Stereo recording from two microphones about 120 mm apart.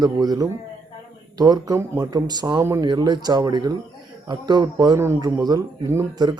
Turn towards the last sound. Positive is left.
turn(degrees=-35)  # may be behind; listen again after turning